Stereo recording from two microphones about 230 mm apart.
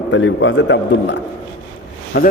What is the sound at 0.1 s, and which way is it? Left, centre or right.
A man's voice, left.